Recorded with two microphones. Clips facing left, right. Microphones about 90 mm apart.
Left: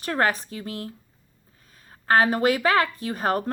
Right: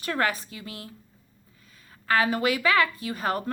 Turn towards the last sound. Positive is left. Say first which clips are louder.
# left 3 dB
turn(degrees=40)  # may be behind; listen again after turning